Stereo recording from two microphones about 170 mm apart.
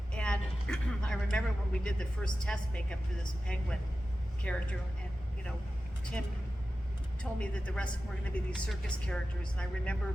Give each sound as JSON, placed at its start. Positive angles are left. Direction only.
{"t": 0.2, "sound": "a man's voice", "side_deg": 5}
{"t": 7.2, "sound": "a woman's voice", "side_deg": 5}